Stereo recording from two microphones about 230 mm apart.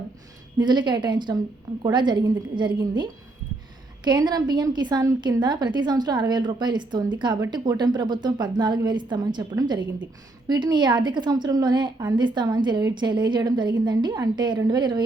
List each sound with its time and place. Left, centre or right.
0.5 s a woman's voice: centre